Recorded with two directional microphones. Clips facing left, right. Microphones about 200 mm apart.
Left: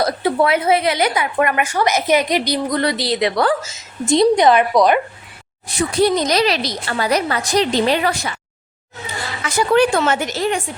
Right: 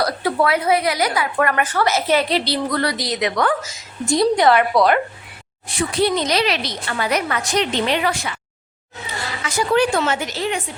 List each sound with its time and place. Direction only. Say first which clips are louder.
0.0 s a woman's voice: left 2 dB; 25° left (ahead or behind)
5.6 s speech: left 3 dB; 40° left (ahead or behind)
9.6 s speech: left 3 dB; 55° left (ahead or behind)